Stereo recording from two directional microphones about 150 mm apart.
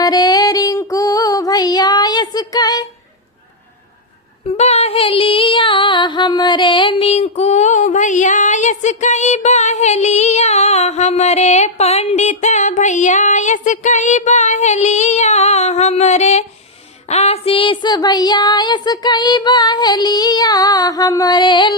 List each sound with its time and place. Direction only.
0.0 s music: 25° left (ahead or behind)
4.4 s female singing: 45° left (ahead or behind)
17.1 s speech: 45° left (ahead or behind)